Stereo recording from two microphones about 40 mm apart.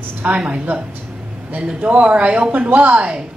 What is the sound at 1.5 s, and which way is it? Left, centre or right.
A man's voice, right.